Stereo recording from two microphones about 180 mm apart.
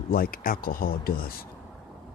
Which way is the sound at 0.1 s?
55° left (ahead or behind).